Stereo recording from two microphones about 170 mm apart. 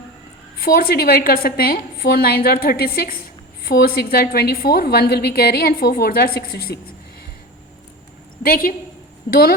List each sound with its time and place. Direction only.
0.6 s a woman's voice: 60° left (ahead or behind)
8.4 s a woman's voice: 55° left (ahead or behind)